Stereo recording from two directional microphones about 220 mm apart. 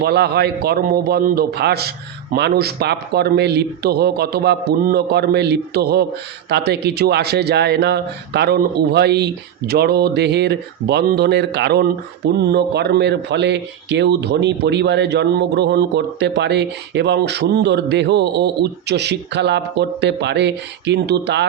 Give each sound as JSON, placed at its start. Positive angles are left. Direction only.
{"t": 0.0, "sound": "speech", "side_deg": -45}